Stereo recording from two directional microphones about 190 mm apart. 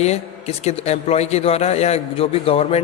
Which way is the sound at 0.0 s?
35° left (ahead or behind).